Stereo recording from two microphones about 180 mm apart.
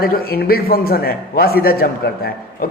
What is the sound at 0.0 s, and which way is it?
A man's voice, 55° left (ahead or behind).